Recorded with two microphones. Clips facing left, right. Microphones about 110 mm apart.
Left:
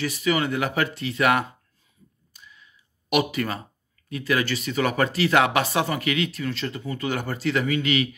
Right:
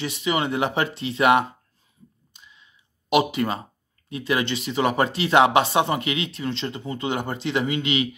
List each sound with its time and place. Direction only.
0.0 s speech: 25° right (ahead or behind)
2.3 s a sound: 25° right (ahead or behind)
4.1 s speech: 25° right (ahead or behind)